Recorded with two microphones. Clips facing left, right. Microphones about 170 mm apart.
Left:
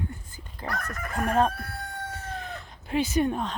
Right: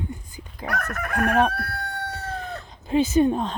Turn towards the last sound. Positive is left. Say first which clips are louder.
# right 6 dB
turn(degrees=-25)  # may be behind; listen again after turning